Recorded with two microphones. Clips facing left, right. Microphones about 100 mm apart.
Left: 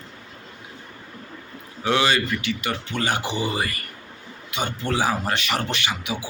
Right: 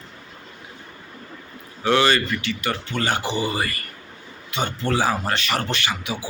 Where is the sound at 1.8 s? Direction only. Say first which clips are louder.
Right 2 dB; 15° left (ahead or behind).